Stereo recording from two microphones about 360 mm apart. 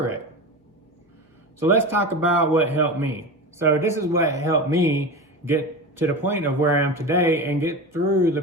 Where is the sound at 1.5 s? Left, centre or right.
Centre.